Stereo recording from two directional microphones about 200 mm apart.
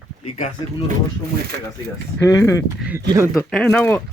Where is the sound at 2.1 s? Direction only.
15° left (ahead or behind).